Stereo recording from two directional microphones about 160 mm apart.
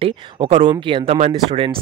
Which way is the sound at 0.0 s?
30° right (ahead or behind).